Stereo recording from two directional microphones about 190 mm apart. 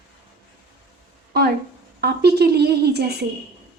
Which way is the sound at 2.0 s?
60° right (ahead or behind).